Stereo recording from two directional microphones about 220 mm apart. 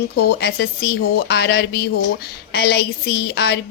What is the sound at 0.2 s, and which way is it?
A woman's voice, 45° left (ahead or behind).